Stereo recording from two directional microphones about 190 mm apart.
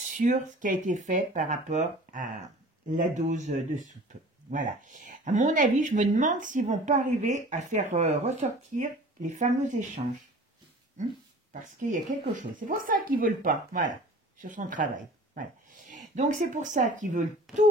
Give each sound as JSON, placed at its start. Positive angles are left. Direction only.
{"t": 0.0, "sound": "speech", "side_deg": -40}
{"t": 11.6, "sound": "speech", "side_deg": -40}